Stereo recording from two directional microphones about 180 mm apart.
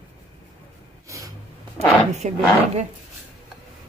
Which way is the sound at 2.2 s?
40° right (ahead or behind).